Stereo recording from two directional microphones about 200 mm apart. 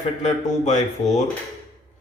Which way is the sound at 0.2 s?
35° left (ahead or behind).